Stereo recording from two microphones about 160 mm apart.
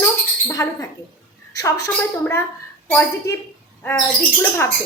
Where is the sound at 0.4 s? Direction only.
20° left (ahead or behind).